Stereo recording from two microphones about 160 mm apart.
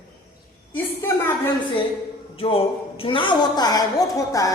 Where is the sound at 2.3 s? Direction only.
35° left (ahead or behind).